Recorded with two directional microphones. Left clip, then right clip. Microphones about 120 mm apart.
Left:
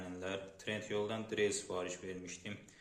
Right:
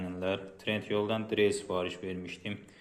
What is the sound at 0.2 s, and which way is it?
Speech, 45° right (ahead or behind).